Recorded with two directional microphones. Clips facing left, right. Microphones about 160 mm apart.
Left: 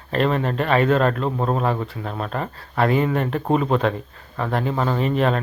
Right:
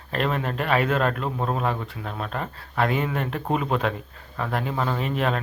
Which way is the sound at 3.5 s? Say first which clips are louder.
Left 5 dB; 35° left (ahead or behind).